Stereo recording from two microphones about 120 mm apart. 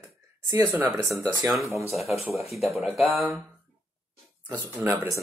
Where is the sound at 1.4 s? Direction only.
Centre (ahead or behind).